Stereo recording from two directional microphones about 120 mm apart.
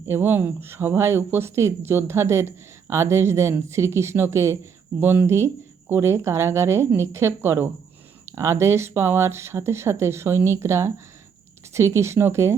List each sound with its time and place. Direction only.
0.1 s speech: 20° right (ahead or behind)